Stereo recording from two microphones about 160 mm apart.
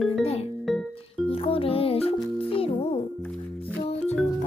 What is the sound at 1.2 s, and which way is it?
Music, 35° left (ahead or behind).